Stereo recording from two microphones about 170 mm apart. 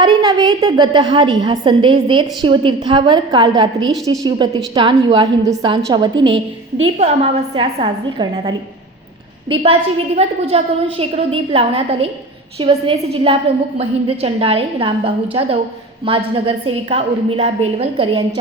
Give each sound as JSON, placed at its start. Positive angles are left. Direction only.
{"t": 0.0, "sound": "a woman's voice", "side_deg": -25}
{"t": 10.2, "sound": "a woman's voice", "side_deg": -35}